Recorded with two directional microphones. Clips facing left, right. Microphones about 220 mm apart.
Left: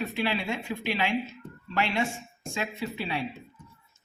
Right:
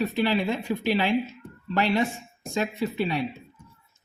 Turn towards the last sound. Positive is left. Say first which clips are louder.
# right 6 dB
turn(degrees=-40)  # may be behind; listen again after turning